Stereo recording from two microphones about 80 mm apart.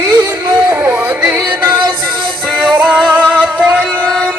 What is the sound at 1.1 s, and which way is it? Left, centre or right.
Music, centre.